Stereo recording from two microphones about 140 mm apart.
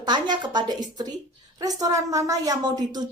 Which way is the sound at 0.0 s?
30° right (ahead or behind).